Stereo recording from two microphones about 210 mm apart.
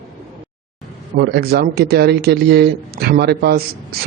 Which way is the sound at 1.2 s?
50° right (ahead or behind).